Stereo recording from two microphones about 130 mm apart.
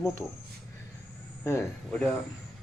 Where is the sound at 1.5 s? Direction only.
20° left (ahead or behind).